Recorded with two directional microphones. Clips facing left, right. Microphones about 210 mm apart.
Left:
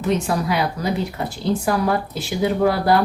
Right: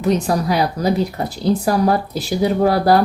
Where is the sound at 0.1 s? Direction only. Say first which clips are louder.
Right 3 dB; 40° right (ahead or behind).